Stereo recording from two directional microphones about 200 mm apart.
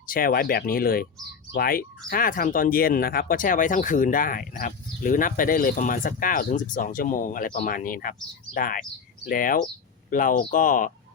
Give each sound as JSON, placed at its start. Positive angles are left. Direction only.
{"t": 0.0, "sound": "speech", "side_deg": 45}